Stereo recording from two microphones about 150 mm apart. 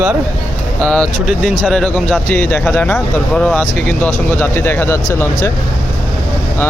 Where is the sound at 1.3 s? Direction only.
5° right (ahead or behind); by 5.5 s 20° left (ahead or behind).